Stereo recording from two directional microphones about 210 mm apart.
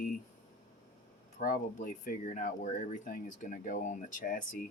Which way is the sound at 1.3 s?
40° left (ahead or behind).